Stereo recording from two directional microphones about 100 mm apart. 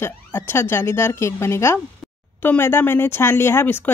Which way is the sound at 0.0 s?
20° left (ahead or behind).